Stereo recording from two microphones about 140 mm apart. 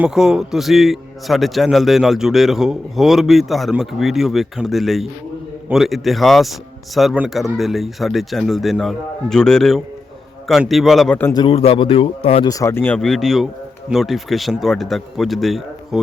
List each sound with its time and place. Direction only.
0.0 s a man's voice: 5° right (ahead or behind)
11.3 s speech: 40° left (ahead or behind)
12.5 s speech: 20° left (ahead or behind)
13.0 s a man's voice: centre (ahead or behind)